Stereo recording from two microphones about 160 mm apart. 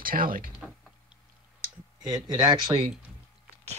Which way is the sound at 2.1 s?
25° right (ahead or behind).